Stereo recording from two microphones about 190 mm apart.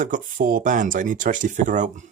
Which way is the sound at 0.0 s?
45° right (ahead or behind).